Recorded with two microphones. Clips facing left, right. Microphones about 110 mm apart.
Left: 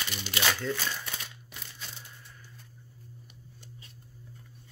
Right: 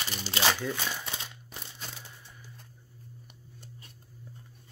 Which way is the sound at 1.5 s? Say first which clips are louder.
Right 2 dB; 35° right (ahead or behind).